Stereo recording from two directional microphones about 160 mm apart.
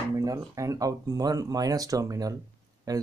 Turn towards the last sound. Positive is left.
turn(degrees=-25)  # may be behind; listen again after turning